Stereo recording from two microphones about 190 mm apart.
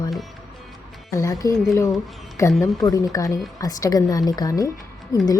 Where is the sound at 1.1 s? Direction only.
15° left (ahead or behind).